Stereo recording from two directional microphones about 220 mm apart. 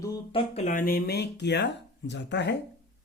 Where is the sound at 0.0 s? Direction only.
20° left (ahead or behind).